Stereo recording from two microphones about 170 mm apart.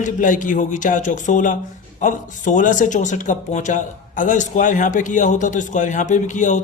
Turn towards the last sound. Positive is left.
turn(degrees=45)  # may be behind; listen again after turning